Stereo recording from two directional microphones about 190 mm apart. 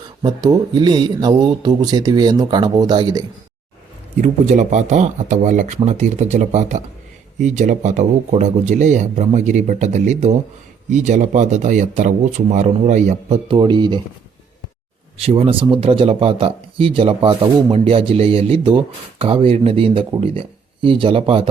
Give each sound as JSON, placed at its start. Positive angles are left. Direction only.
{"t": 0.2, "sound": "speech", "side_deg": -20}
{"t": 4.2, "sound": "a man's voice", "side_deg": -40}
{"t": 15.2, "sound": "speech", "side_deg": -30}